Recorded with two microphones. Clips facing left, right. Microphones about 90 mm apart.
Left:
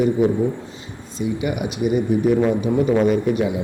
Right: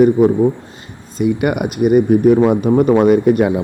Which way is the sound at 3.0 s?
60° right (ahead or behind).